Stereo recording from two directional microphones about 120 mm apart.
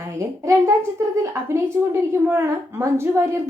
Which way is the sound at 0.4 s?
20° right (ahead or behind).